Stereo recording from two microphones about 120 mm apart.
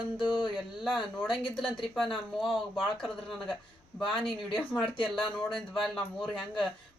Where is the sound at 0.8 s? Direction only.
5° right (ahead or behind).